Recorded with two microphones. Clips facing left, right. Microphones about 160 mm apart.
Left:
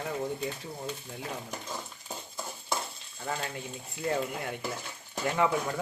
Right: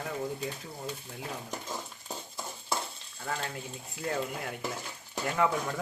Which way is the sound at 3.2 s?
5° left (ahead or behind).